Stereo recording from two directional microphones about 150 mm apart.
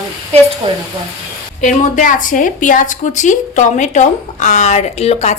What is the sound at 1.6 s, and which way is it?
A woman's voice, 60° left (ahead or behind).